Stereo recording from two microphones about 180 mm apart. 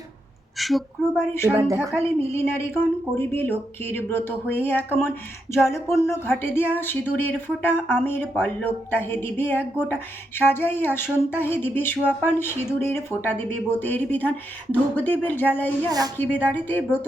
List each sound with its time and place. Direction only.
1.5 s speech: 5° right (ahead or behind)
2.0 s speech: 15° left (ahead or behind)
15.9 s a woman's voice: 20° right (ahead or behind)
16.1 s speech: 10° left (ahead or behind)